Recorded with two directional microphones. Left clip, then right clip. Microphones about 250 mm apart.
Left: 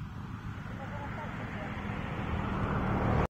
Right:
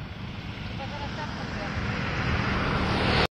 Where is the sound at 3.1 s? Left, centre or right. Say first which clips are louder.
Right 10 dB; right.